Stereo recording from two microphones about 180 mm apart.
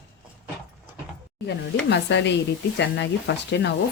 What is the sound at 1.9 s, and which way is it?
Speech, 75° left (ahead or behind).